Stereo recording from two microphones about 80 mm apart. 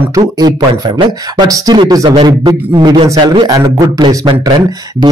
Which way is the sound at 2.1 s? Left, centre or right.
Right.